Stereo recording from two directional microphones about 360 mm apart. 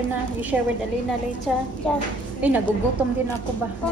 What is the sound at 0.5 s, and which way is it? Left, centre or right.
Speech, centre.